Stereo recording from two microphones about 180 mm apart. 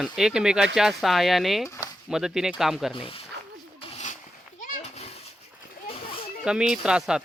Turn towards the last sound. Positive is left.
turn(degrees=-5)  # may be behind; listen again after turning